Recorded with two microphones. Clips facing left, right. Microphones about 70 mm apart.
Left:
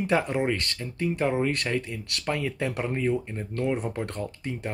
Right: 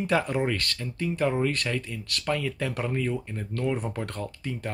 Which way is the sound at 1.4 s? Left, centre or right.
Left.